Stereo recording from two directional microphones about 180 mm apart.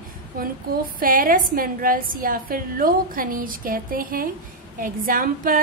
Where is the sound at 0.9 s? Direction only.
50° right (ahead or behind).